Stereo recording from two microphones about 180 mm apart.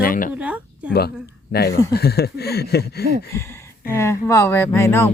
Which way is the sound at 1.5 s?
60° left (ahead or behind).